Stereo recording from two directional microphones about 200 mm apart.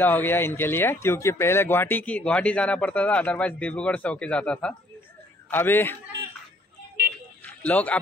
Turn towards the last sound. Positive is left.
turn(degrees=5)  # may be behind; listen again after turning